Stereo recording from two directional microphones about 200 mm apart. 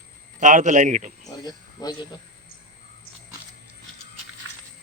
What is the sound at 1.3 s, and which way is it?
Speech, 20° left (ahead or behind).